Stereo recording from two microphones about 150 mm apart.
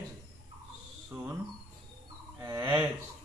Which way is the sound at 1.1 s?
10° right (ahead or behind).